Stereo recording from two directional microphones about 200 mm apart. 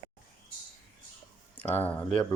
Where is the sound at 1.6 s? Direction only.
10° left (ahead or behind).